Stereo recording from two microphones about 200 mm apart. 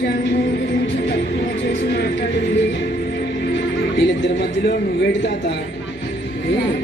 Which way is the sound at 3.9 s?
65° left (ahead or behind).